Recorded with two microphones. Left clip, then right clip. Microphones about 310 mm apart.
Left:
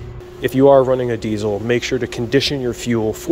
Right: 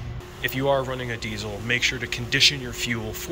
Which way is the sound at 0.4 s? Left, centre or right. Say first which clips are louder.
Left 12 dB; left.